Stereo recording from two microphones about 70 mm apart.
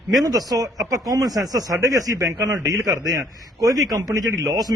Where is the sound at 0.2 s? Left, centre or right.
Right.